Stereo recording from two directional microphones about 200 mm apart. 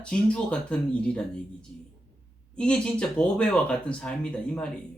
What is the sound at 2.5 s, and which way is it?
A man's voice, 5° left (ahead or behind).